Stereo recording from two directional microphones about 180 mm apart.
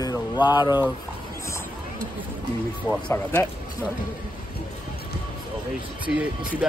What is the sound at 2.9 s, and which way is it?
Speech, 10° left (ahead or behind).